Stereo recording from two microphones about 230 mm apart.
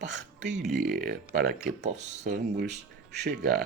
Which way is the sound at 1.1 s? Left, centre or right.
Right.